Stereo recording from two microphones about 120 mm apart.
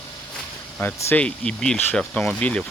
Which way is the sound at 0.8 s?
15° left (ahead or behind).